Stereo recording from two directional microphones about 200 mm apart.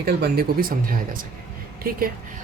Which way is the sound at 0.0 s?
50° right (ahead or behind).